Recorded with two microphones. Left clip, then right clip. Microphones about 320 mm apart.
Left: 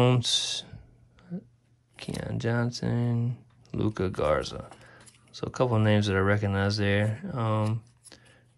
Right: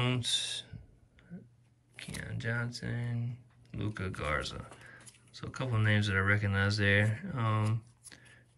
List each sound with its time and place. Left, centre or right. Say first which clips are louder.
0.0 s speech: left 8 dB; centre
2.0 s speech: left 7 dB; centre